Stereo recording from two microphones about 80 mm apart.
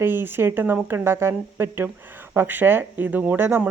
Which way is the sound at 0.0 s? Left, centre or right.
Right.